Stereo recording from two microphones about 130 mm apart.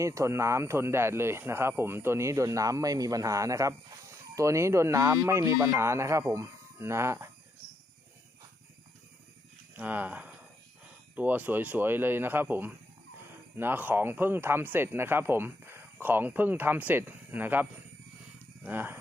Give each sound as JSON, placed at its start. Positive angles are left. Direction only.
{"t": 0.0, "sound": "speech", "side_deg": -25}
{"t": 9.7, "sound": "speech", "side_deg": -15}